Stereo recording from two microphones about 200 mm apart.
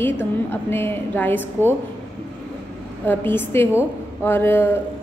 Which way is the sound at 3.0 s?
10° left (ahead or behind).